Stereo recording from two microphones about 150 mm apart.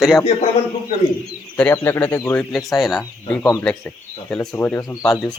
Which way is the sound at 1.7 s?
15° left (ahead or behind).